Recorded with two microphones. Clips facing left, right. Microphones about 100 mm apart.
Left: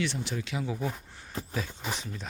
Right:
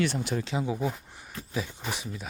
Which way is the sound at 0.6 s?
15° right (ahead or behind).